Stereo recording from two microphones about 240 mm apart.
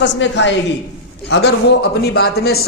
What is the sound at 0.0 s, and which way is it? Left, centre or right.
A man's voice, left.